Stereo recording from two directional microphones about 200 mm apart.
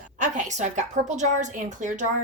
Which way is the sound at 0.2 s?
40° right (ahead or behind).